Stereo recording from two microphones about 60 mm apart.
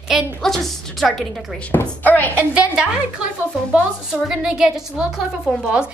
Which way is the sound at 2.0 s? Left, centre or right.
Left.